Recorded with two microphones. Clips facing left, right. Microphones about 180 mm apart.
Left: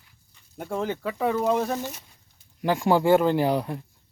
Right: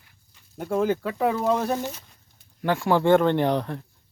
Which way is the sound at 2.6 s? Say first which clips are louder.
Even; 15° left (ahead or behind).